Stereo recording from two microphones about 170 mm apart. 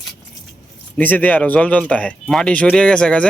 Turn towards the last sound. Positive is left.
turn(degrees=5)  # may be behind; listen again after turning